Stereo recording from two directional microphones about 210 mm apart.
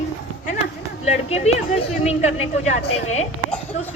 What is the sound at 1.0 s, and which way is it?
Speech, 30° left (ahead or behind).